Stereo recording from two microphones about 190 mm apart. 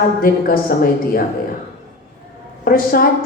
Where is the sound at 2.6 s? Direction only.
50° left (ahead or behind).